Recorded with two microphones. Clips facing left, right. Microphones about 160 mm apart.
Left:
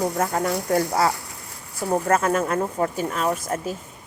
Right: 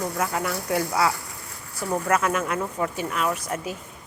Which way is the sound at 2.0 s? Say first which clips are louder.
Left 2 dB; 40° left (ahead or behind).